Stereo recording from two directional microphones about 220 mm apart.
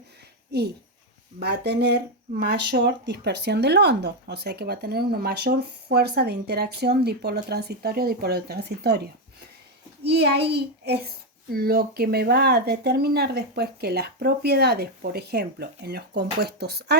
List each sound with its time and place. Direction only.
0.5 s speech: 50° right (ahead or behind)